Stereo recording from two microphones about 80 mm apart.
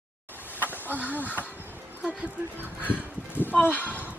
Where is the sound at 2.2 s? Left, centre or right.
Centre.